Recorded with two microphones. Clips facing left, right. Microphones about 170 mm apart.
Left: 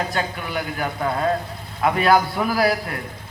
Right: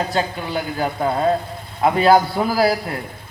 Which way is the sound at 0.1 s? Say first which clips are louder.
Right 4 dB; 30° right (ahead or behind).